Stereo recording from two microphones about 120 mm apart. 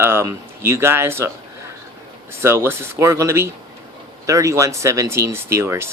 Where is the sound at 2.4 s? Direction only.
20° right (ahead or behind).